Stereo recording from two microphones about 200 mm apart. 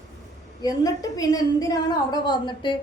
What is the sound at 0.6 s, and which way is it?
A woman's voice, 20° left (ahead or behind).